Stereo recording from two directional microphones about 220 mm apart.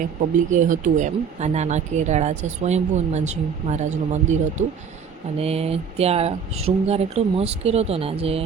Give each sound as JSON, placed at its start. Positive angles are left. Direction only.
{"t": 0.2, "sound": "speech", "side_deg": -35}